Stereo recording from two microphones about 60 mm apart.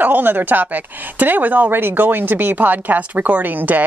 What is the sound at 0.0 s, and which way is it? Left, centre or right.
A woman's voice, right.